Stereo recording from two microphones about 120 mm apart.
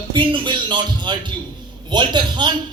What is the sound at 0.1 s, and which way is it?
A man's voice, 45° right (ahead or behind).